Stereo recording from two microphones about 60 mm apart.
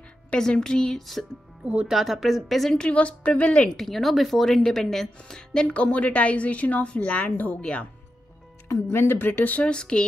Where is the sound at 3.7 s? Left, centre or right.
Centre; by 7.9 s left.